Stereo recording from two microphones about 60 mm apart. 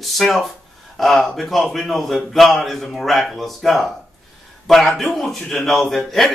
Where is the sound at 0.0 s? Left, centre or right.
Centre.